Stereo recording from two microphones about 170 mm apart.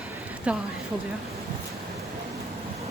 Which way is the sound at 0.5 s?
5° right (ahead or behind).